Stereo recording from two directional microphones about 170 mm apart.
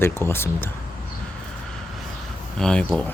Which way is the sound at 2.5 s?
5° left (ahead or behind).